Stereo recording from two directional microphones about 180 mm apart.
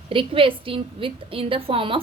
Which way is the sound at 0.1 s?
30° right (ahead or behind).